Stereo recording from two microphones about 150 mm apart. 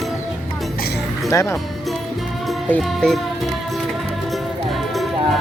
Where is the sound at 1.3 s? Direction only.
20° left (ahead or behind).